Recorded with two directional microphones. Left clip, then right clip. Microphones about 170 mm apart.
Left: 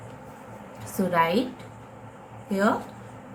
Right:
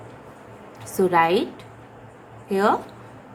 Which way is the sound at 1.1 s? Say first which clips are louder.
Right 4 dB; 45° right (ahead or behind).